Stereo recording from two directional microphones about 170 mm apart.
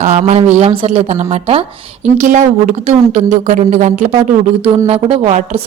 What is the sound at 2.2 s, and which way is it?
A woman's voice, 45° right (ahead or behind).